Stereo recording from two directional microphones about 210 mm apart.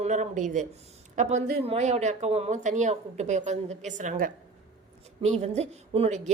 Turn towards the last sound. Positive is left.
turn(degrees=-30)  # may be behind; listen again after turning